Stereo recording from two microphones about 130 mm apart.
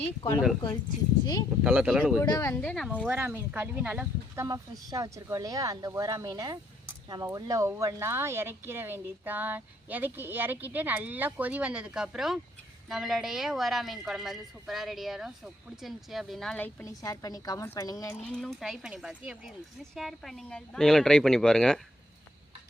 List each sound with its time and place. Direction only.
1.2 s speech: 30° left (ahead or behind)
1.6 s speech: 10° right (ahead or behind)
2.2 s a woman's voice: 25° left (ahead or behind)
2.6 s speech: 10° left (ahead or behind)
2.9 s speech: 10° right (ahead or behind)
4.4 s speech: 25° right (ahead or behind); by 16.9 s 15° left (ahead or behind)
17.0 s a woman's voice: 25° left (ahead or behind)
18.3 s speech: 5° left (ahead or behind)